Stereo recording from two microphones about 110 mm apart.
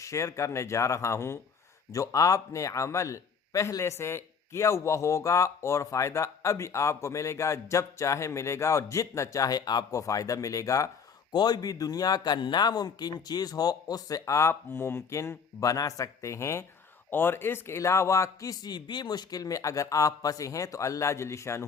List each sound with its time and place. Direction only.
0.0 s a man's voice: 30° left (ahead or behind)